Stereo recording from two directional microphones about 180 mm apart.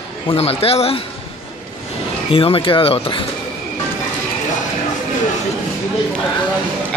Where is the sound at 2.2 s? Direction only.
30° left (ahead or behind).